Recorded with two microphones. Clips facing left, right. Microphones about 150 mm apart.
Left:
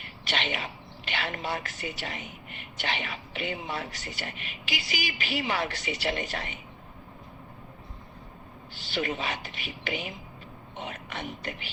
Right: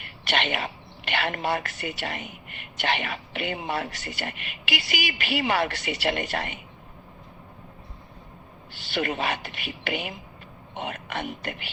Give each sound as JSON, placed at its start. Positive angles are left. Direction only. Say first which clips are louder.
{"t": 0.0, "sound": "a woman's voice", "louder": "right 5 dB", "side_deg": -65}
{"t": 8.7, "sound": "a woman's voice", "louder": "right 3 dB", "side_deg": -65}